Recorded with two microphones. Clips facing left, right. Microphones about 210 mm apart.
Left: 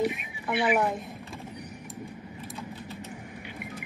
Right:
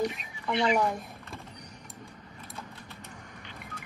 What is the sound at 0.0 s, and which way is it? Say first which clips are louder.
A woman's voice: left 3 dB; 10° left (ahead or behind).